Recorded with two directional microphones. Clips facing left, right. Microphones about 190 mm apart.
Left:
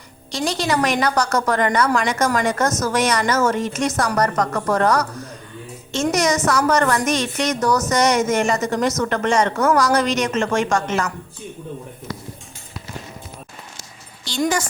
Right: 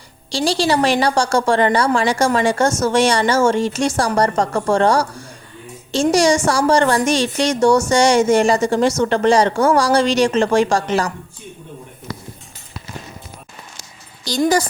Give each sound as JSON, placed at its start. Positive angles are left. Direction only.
{"t": 0.3, "sound": "a woman's voice", "side_deg": -30}
{"t": 14.3, "sound": "a woman's voice", "side_deg": -35}